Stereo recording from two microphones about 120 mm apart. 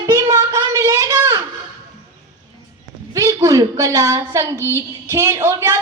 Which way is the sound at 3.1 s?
30° right (ahead or behind).